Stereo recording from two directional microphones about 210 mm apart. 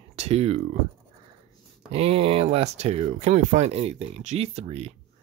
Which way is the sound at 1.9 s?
30° right (ahead or behind).